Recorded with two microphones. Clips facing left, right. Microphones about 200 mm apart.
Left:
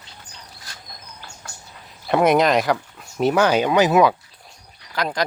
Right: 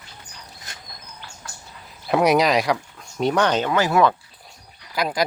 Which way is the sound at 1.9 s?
Centre (ahead or behind).